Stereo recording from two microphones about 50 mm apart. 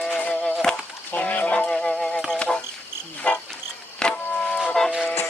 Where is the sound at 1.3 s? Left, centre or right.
Left.